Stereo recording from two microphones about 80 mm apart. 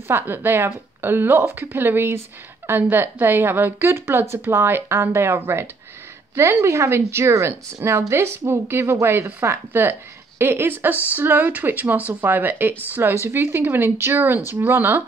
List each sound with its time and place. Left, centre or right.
0.1 s a woman's voice: right